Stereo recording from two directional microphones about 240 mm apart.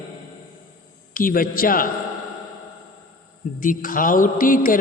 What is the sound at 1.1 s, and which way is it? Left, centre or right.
Speech, left.